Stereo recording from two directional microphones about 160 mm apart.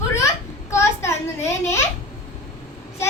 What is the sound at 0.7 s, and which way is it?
A child's voice, 15° left (ahead or behind).